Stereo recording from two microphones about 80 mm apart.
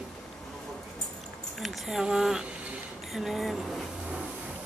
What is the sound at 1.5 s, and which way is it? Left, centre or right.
Speech, centre.